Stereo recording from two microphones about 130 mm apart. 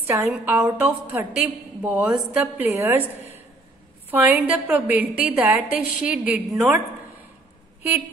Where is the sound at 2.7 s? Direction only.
20° right (ahead or behind).